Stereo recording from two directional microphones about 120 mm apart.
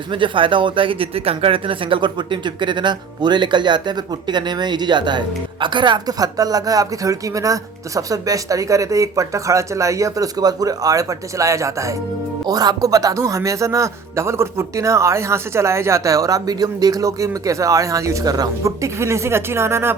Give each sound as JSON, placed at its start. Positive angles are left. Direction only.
{"t": 0.1, "sound": "speech", "side_deg": -45}